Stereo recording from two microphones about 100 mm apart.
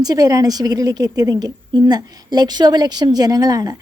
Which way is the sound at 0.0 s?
40° right (ahead or behind).